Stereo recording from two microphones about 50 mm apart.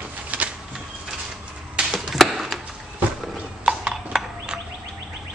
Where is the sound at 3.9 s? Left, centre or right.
Centre.